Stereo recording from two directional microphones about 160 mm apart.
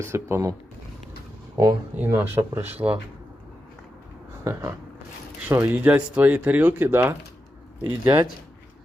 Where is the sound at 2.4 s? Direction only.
20° right (ahead or behind).